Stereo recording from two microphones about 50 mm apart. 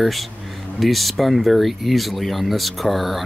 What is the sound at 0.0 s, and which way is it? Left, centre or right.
Speech, centre.